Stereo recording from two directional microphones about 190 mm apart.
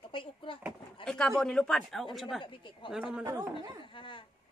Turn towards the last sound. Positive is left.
turn(degrees=25)  # may be behind; listen again after turning